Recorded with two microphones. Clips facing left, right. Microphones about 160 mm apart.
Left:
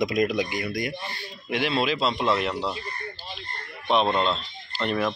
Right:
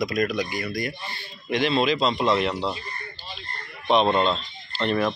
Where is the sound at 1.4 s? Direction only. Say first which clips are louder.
Right 3 dB; 5° left (ahead or behind).